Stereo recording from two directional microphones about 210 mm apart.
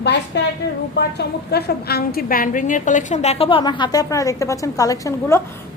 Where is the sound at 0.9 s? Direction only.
50° left (ahead or behind); by 5.4 s 15° left (ahead or behind).